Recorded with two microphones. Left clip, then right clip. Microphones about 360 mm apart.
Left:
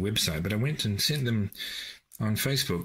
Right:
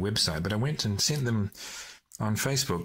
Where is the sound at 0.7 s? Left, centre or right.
Right.